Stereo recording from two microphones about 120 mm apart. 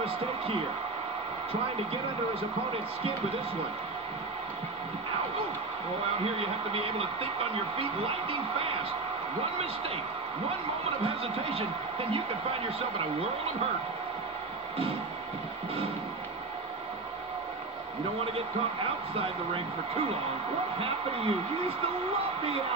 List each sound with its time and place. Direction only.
6.2 s speech: 55° right (ahead or behind)
11.4 s speech: 50° right (ahead or behind)
19.1 s speech: 50° right (ahead or behind)